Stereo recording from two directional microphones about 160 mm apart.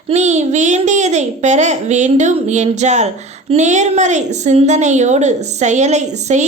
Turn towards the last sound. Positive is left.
turn(degrees=-45)  # may be behind; listen again after turning